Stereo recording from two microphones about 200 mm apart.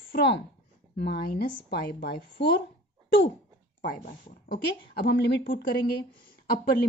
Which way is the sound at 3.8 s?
50° left (ahead or behind).